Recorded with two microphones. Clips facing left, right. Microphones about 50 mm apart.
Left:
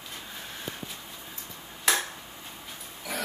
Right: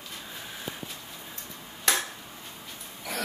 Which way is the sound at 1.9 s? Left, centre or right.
Centre.